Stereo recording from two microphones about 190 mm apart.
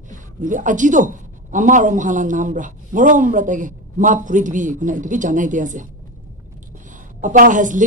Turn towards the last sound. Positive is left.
turn(degrees=-40)  # may be behind; listen again after turning